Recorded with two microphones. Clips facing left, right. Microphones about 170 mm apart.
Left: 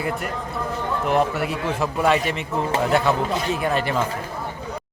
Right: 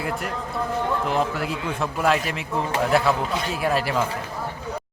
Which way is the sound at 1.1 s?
Centre (ahead or behind).